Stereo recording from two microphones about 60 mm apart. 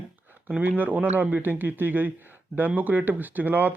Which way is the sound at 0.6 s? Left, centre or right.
Right.